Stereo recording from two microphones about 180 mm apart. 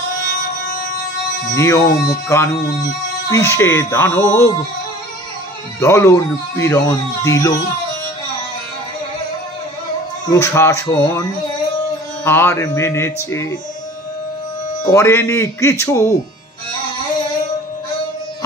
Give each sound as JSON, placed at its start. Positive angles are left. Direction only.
{"t": 1.5, "sound": "speech", "side_deg": 15}
{"t": 5.8, "sound": "speech", "side_deg": 15}
{"t": 10.2, "sound": "speech", "side_deg": 15}
{"t": 12.3, "sound": "speech", "side_deg": 15}
{"t": 14.9, "sound": "speech", "side_deg": 15}